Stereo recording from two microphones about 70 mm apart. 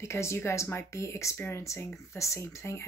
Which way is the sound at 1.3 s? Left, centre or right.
Left.